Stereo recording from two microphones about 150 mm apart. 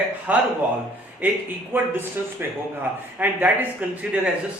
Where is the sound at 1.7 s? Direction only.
15° right (ahead or behind).